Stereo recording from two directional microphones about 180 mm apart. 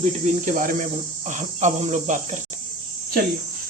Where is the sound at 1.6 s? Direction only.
40° right (ahead or behind).